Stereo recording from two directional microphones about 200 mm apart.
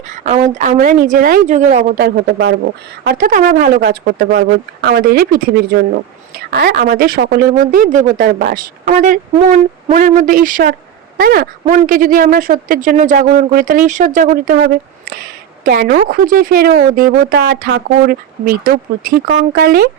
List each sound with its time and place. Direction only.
0.1 s a woman's voice: 40° right (ahead or behind)